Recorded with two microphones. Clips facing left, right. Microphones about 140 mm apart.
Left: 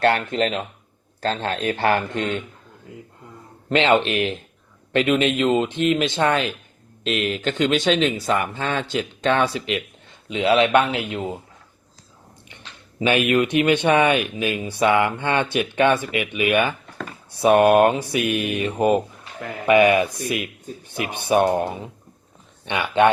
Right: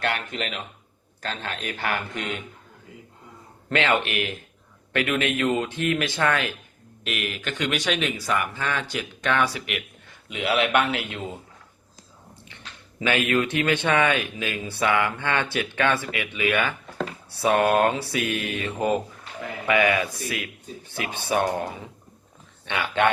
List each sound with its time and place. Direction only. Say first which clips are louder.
0.0 s a man's voice: left 9 dB; 35° left (ahead or behind)
3.7 s speech: left 6 dB; 20° left (ahead or behind)
12.5 s speech: left 3 dB; 20° left (ahead or behind)